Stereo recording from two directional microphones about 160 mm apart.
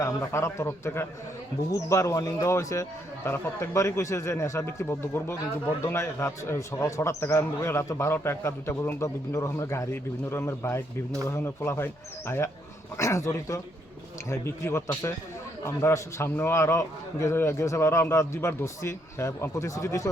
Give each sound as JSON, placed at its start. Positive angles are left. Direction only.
{"t": 0.0, "sound": "speech", "side_deg": 15}